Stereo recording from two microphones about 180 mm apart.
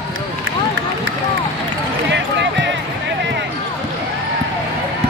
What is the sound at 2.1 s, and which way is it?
Basketball bounce, 75° right (ahead or behind).